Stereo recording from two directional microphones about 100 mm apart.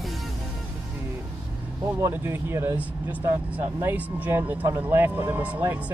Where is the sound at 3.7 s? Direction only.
20° right (ahead or behind).